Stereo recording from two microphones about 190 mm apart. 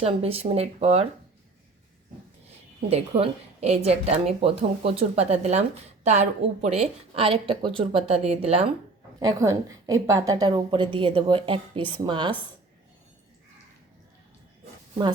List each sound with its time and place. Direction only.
0.0 s a woman's voice: 30° right (ahead or behind)
2.9 s a woman's voice: 35° right (ahead or behind)
9.2 s a woman's voice: 15° right (ahead or behind)